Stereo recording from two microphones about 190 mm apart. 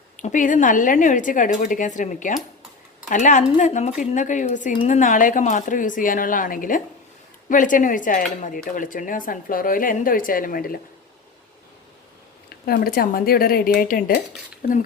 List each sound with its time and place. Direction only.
0.2 s a woman's voice: 45° left (ahead or behind)
12.5 s a woman's voice: 50° left (ahead or behind)